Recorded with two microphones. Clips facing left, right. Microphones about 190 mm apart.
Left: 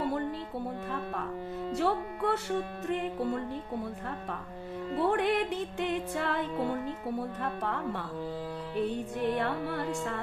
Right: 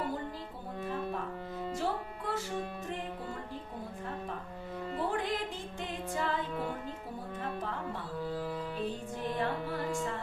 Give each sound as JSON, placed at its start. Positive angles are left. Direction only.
{"t": 1.7, "sound": "music", "side_deg": 65}
{"t": 4.9, "sound": "music", "side_deg": 65}
{"t": 7.4, "sound": "music", "side_deg": 65}
{"t": 9.1, "sound": "music", "side_deg": 65}